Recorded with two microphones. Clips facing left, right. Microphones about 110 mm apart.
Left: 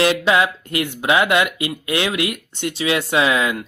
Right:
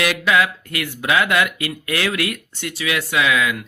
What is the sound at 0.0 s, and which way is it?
Speech, 30° left (ahead or behind).